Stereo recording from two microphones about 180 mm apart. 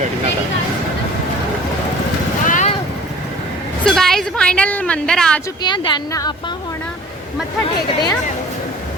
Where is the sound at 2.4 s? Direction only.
45° left (ahead or behind).